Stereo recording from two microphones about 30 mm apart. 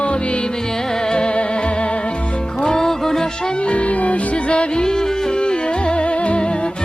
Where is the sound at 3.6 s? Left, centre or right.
Left.